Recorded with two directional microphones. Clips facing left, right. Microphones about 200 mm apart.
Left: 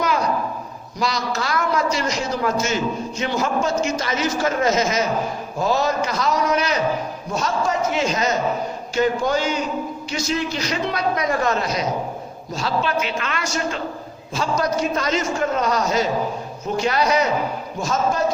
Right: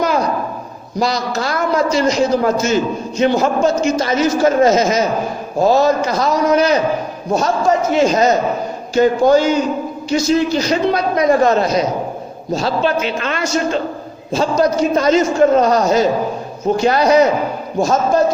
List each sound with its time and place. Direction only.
0.9 s a man's voice: 35° right (ahead or behind)
7.9 s a man's voice: 40° right (ahead or behind)